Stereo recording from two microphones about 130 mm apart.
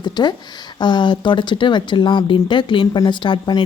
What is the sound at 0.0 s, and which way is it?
Speech, 35° left (ahead or behind).